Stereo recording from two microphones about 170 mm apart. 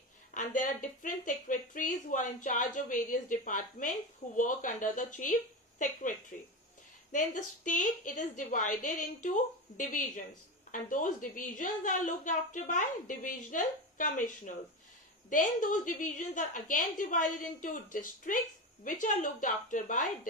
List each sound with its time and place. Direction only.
0.3 s a woman's voice: 50° left (ahead or behind)